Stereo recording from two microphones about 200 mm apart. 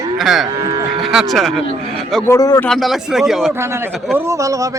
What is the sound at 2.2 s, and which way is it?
Speech, 15° left (ahead or behind).